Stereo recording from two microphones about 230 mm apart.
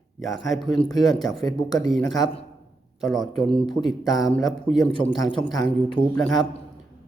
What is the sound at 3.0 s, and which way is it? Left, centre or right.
Speech, centre.